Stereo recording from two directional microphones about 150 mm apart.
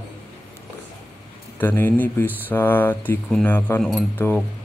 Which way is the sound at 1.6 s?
10° left (ahead or behind).